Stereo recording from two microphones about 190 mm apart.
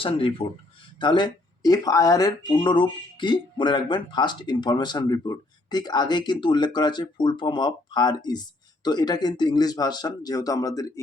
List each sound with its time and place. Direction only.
0.0 s speech: 30° left (ahead or behind)